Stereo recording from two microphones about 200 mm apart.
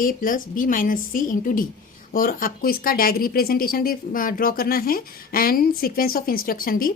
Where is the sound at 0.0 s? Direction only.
45° left (ahead or behind).